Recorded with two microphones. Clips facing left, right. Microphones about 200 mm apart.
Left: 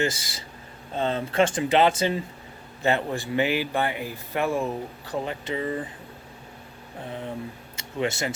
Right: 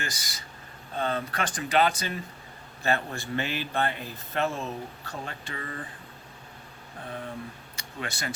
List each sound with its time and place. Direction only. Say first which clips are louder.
0.0 s speech: left 11 dB; 25° left (ahead or behind)
7.8 s speech: left 10 dB; 25° left (ahead or behind)